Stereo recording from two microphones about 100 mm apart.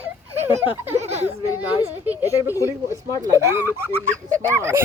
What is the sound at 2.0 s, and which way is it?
Speech, 20° right (ahead or behind).